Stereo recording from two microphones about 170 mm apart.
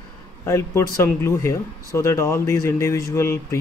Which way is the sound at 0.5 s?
15° left (ahead or behind).